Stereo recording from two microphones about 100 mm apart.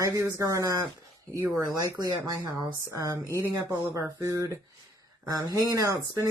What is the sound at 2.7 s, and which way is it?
Speech, 30° right (ahead or behind).